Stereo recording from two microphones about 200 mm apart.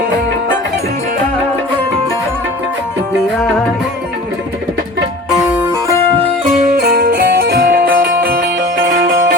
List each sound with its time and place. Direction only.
6.8 s music: 50° right (ahead or behind)